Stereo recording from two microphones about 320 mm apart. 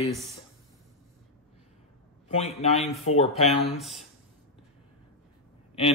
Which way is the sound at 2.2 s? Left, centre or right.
Centre.